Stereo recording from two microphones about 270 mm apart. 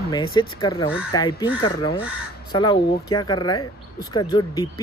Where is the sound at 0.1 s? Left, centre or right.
Centre.